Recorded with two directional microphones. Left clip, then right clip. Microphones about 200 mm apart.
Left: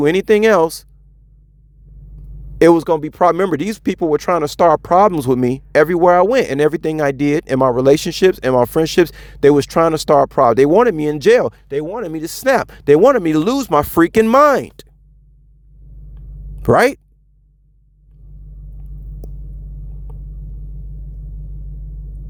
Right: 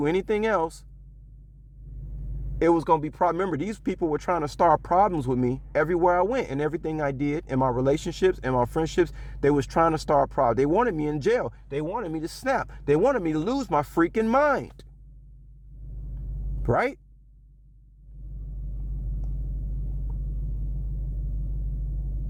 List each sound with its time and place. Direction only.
0.0 s speech: 30° left (ahead or behind)
2.6 s speech: 35° left (ahead or behind)
16.6 s speech: 35° left (ahead or behind)